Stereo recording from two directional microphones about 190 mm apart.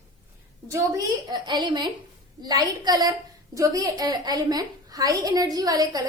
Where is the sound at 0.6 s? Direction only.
15° right (ahead or behind).